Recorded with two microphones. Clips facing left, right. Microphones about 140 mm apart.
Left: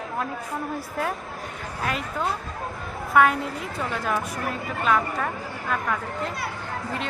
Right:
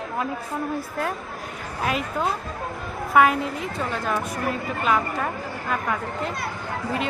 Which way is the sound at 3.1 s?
5° right (ahead or behind).